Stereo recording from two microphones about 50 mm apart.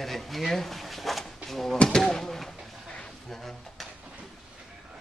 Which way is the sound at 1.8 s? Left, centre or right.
Centre.